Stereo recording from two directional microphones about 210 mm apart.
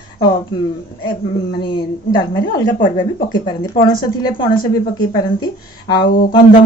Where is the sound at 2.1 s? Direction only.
15° left (ahead or behind).